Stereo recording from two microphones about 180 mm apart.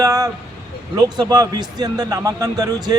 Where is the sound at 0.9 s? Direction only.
20° right (ahead or behind).